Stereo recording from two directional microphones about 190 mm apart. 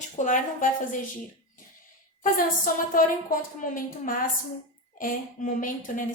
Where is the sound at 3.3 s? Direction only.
45° left (ahead or behind).